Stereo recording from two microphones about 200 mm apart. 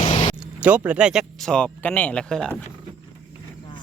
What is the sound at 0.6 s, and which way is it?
Speech, 5° right (ahead or behind).